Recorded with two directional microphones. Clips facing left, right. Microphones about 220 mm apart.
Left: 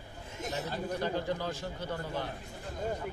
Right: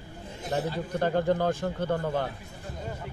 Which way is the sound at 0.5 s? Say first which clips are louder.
Right 6 dB; 55° right (ahead or behind).